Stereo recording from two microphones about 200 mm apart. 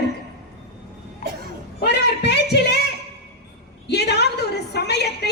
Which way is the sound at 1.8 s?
55° left (ahead or behind).